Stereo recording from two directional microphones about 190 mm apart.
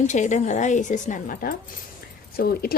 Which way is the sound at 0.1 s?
40° left (ahead or behind).